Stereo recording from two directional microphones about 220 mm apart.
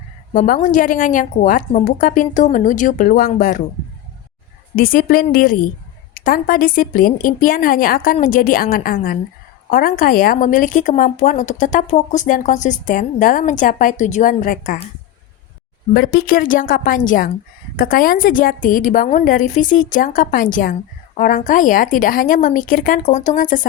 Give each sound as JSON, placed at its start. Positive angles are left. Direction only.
{"t": 0.3, "sound": "speech", "side_deg": 35}
{"t": 4.7, "sound": "speech", "side_deg": 40}
{"t": 15.9, "sound": "speech", "side_deg": 40}